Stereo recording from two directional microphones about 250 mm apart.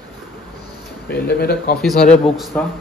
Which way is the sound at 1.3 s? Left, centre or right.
Left.